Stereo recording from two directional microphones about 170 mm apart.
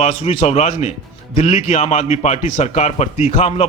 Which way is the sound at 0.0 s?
40° left (ahead or behind).